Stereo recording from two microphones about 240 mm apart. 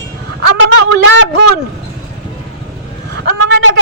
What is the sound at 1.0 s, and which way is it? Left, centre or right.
Speech, right.